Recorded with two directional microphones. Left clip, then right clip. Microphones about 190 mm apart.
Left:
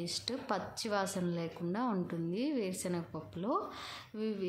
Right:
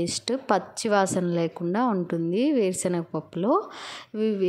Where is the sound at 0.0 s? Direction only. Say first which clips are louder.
Right 11 dB; 40° right (ahead or behind).